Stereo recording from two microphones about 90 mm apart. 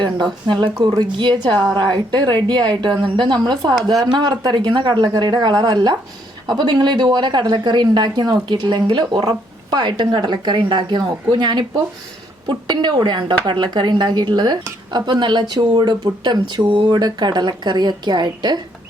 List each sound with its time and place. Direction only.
0.0 s speech: 55° right (ahead or behind)